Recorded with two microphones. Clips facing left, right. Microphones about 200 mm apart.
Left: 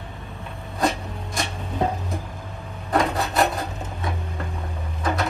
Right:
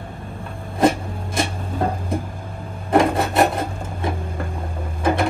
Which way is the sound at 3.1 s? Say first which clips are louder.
Right 4 dB; 25° right (ahead or behind).